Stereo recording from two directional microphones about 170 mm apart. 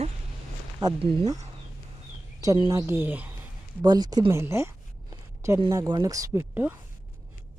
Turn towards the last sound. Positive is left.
turn(degrees=-10)  # may be behind; listen again after turning